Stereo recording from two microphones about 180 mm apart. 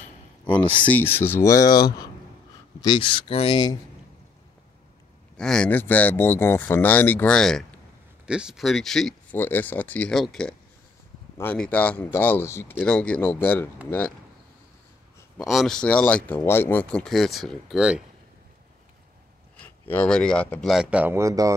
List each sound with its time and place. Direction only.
0.9 s speech: 10° left (ahead or behind); by 3.6 s 30° left (ahead or behind)
5.4 s speech: 5° left (ahead or behind)
15.3 s speech: centre (ahead or behind)
19.6 s speech: 10° left (ahead or behind)
20.7 s speech: 5° right (ahead or behind)